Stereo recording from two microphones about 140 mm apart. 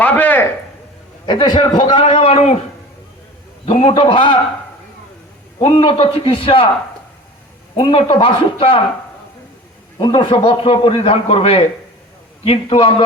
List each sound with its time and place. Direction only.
0.0 s a sound: 10° left (ahead or behind)
1.3 s a man's voice: 30° left (ahead or behind)
3.7 s a man's voice: 40° left (ahead or behind)
5.5 s a man's voice: 35° left (ahead or behind)
7.8 s a man's voice: 35° left (ahead or behind)
10.0 s a man's voice: 35° left (ahead or behind)